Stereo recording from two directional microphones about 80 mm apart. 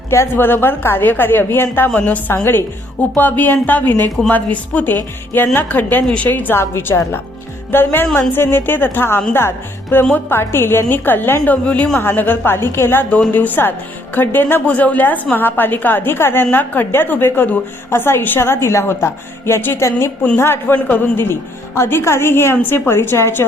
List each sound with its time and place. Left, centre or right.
0.1 s a woman's voice: left; by 11.9 s centre
11.9 s a woman's voice: left